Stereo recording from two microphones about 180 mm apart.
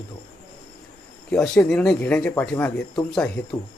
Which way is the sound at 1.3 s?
5° left (ahead or behind).